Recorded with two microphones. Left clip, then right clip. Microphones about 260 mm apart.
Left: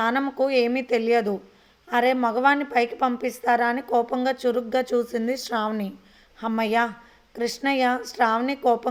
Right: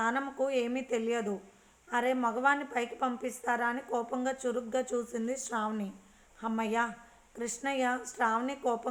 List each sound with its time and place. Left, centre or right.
0.0 s a woman's voice: left